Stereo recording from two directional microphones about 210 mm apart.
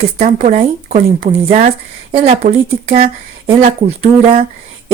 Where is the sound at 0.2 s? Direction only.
35° right (ahead or behind).